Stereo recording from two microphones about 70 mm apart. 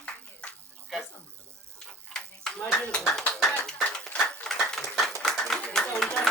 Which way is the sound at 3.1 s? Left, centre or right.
Centre.